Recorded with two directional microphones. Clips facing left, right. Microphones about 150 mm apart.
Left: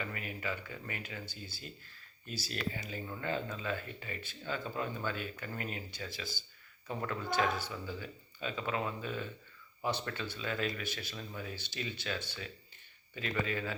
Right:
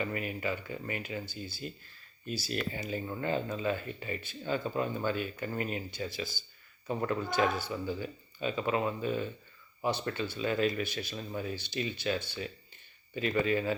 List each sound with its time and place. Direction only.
0.0 s speech: 25° right (ahead or behind)
2.8 s speech: 25° right (ahead or behind)
6.8 s speech: 25° right (ahead or behind)
7.3 s speech: 10° right (ahead or behind)
11.1 s speech: 30° right (ahead or behind)
11.5 s speech: 15° right (ahead or behind)